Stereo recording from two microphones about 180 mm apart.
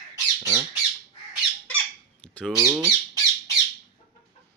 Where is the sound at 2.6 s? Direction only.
15° right (ahead or behind).